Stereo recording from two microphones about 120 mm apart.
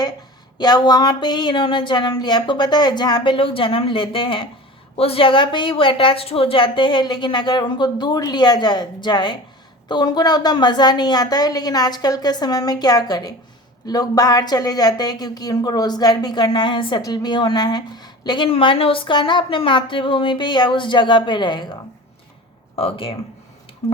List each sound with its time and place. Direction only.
0.6 s a woman's voice: 35° left (ahead or behind)
18.5 s speech: 50° left (ahead or behind)
22.7 s speech: 50° left (ahead or behind)